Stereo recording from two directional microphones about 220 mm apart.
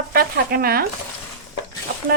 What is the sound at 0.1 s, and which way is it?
Speech, 40° right (ahead or behind).